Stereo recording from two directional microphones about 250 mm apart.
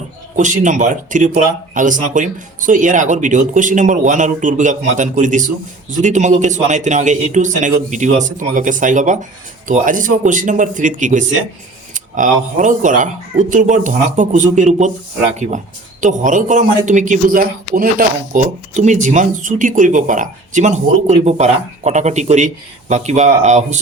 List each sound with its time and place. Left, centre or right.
0.3 s speech: right